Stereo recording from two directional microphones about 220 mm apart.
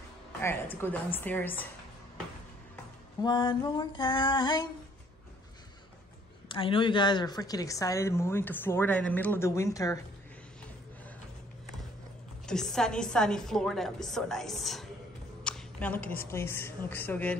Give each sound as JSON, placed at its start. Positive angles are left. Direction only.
{"t": 0.4, "sound": "a woman's voice", "side_deg": 10}
{"t": 3.2, "sound": "female singing", "side_deg": 20}
{"t": 6.5, "sound": "a woman's voice", "side_deg": 25}
{"t": 12.4, "sound": "a woman's voice", "side_deg": 0}
{"t": 15.4, "sound": "a sound", "side_deg": 5}
{"t": 16.2, "sound": "a woman's voice", "side_deg": 10}